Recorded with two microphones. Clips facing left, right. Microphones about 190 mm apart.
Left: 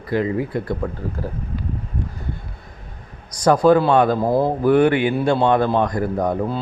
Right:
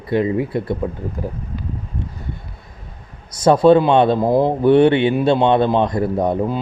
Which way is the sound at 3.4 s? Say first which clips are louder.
Right 3 dB; 25° right (ahead or behind).